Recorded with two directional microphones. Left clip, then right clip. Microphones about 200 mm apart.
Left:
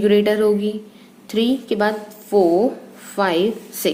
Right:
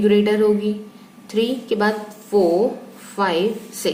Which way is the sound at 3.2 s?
40° left (ahead or behind).